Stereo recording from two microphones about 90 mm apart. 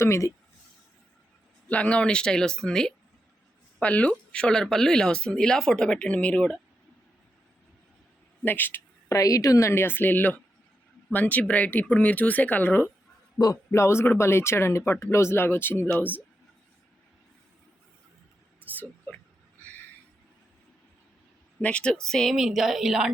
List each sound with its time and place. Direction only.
0.0 s speech: 35° left (ahead or behind)
1.6 s speech: 15° left (ahead or behind)
8.4 s speech: 20° left (ahead or behind)
9.0 s speech: 40° left (ahead or behind)
19.1 s a sound: 15° left (ahead or behind)
21.6 s a woman's voice: 15° left (ahead or behind); by 23.0 s 5° right (ahead or behind)